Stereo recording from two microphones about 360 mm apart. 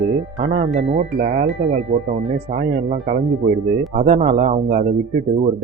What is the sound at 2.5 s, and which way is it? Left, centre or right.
A man's voice, right.